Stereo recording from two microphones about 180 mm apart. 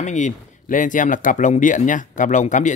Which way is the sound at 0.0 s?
40° left (ahead or behind).